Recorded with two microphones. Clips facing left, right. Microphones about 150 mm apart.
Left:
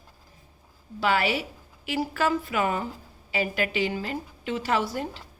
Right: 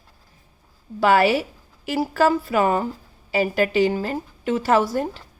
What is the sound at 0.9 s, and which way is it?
A woman's voice, 45° right (ahead or behind).